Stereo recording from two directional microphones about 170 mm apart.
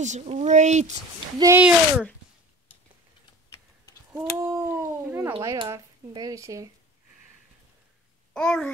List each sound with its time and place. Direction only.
0.0 s speech: 45° right (ahead or behind)
1.4 s speech: 10° right (ahead or behind)
4.4 s dog: 15° right (ahead or behind)
5.4 s speech: 20° right (ahead or behind)
8.3 s a child's voice: 5° left (ahead or behind)